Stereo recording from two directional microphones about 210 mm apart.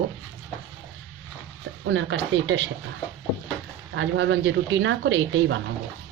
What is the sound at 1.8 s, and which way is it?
Speech, 60° right (ahead or behind).